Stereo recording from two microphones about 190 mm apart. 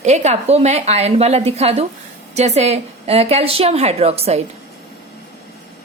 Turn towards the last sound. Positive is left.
turn(degrees=-35)  # may be behind; listen again after turning